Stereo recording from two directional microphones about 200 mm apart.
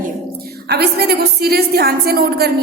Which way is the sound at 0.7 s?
55° right (ahead or behind).